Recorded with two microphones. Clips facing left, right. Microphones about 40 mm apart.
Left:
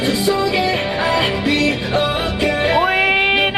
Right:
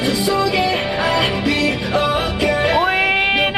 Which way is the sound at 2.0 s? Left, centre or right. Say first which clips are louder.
Even; centre.